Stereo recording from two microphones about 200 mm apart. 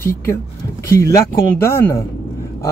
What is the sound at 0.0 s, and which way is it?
Speech, 10° left (ahead or behind).